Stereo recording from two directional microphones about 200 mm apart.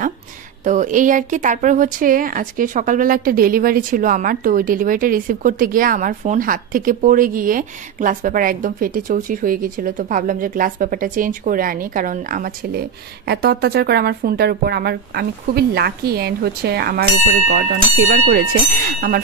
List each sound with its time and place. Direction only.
0.7 s speech: 40° right (ahead or behind)